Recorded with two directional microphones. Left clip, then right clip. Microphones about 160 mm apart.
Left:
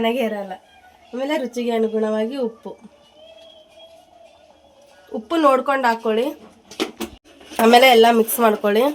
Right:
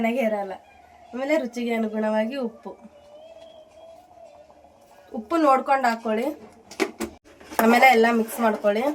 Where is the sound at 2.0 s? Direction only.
65° left (ahead or behind).